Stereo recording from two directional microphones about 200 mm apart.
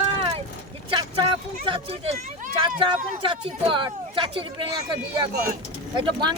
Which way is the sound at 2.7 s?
40° right (ahead or behind).